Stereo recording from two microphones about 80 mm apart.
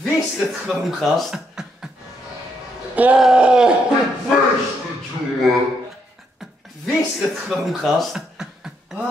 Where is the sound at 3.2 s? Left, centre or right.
Centre.